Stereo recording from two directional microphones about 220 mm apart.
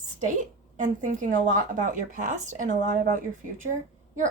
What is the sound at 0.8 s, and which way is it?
Speech, 35° right (ahead or behind).